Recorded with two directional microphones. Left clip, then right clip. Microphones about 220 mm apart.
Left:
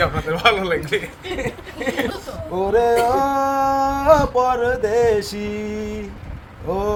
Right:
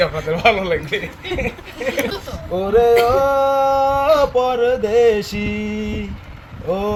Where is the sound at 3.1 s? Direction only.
40° left (ahead or behind).